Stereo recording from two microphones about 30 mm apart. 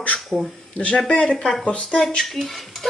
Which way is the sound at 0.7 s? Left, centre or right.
Left.